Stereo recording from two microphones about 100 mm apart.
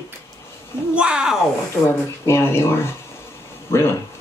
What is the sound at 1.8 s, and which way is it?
Speech, 25° left (ahead or behind).